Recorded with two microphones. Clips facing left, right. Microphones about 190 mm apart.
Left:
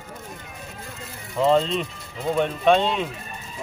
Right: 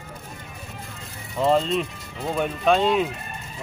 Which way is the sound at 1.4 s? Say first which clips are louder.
Left 1 dB; centre (ahead or behind).